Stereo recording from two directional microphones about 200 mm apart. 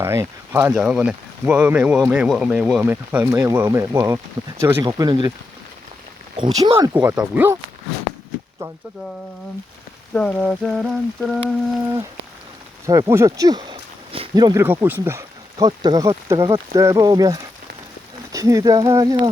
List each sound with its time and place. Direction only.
0.0 s speech: 15° right (ahead or behind)
6.3 s speech: 20° right (ahead or behind)
6.9 s speech: 10° right (ahead or behind)
10.2 s rain on surface: 5° left (ahead or behind)
12.8 s speech: 15° right (ahead or behind)